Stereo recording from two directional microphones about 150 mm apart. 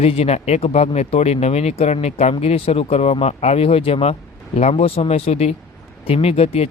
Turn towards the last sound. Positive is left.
turn(degrees=40)  # may be behind; listen again after turning